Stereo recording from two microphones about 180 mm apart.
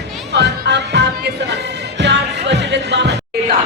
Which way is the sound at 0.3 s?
70° right (ahead or behind).